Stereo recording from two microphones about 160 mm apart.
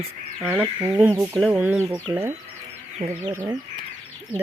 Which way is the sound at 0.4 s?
10° right (ahead or behind).